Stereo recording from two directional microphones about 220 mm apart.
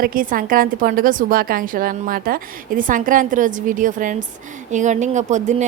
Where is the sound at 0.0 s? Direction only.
40° right (ahead or behind).